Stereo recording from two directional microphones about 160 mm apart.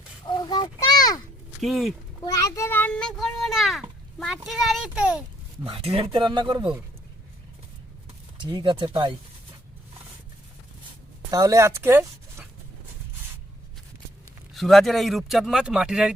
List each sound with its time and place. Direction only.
0.3 s a sound: 25° left (ahead or behind)
1.6 s a child's voice: centre (ahead or behind)
2.2 s a child's voice: 20° left (ahead or behind); by 5.2 s 5° right (ahead or behind)
5.6 s speech: 35° right (ahead or behind)
8.4 s speech: 30° right (ahead or behind)
11.3 s speech: 20° right (ahead or behind)
14.5 s a child's voice: centre (ahead or behind)